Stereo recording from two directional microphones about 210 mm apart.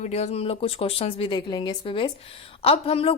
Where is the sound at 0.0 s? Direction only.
30° left (ahead or behind).